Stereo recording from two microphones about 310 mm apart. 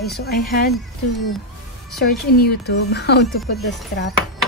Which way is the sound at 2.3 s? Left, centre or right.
Left.